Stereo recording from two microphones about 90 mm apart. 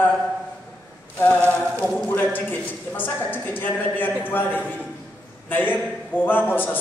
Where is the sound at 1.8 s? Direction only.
20° left (ahead or behind).